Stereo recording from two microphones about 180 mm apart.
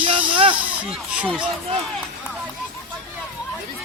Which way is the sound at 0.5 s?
10° right (ahead or behind).